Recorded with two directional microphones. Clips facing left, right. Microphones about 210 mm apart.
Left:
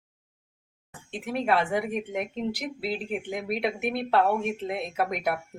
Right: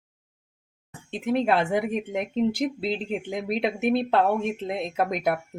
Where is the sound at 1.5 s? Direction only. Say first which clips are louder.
Right 2 dB; 25° right (ahead or behind).